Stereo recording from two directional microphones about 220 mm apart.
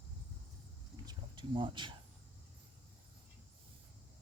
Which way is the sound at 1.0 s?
20° right (ahead or behind).